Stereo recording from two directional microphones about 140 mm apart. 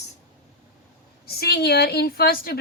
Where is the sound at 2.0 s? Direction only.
90° left.